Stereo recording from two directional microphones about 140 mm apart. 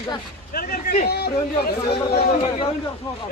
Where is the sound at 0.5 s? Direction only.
90° left.